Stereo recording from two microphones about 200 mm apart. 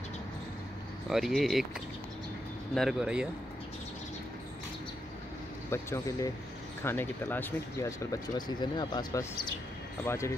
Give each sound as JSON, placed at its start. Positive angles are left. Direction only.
{"t": 1.0, "sound": "speech", "side_deg": 0}
{"t": 2.7, "sound": "speech", "side_deg": 0}
{"t": 5.7, "sound": "speech", "side_deg": 15}